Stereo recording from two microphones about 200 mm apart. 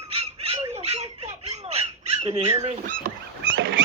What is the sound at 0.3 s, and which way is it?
Squawk, 30° right (ahead or behind).